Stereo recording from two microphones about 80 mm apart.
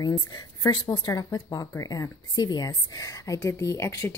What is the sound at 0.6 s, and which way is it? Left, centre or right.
Speech, left.